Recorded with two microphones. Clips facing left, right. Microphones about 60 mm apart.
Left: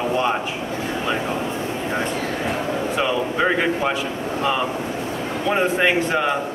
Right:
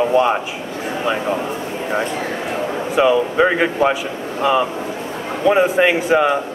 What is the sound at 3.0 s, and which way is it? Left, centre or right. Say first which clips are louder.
Speech: right 8 dB; centre.